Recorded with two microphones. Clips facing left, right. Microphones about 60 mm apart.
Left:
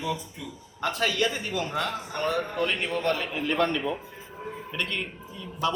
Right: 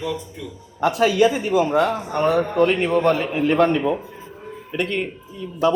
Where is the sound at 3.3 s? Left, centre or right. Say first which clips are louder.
Right 8 dB; right.